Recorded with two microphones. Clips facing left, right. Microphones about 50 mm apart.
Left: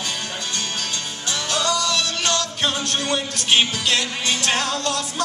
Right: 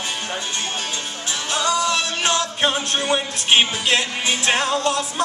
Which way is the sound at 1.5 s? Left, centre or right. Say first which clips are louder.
Right 2 dB; right.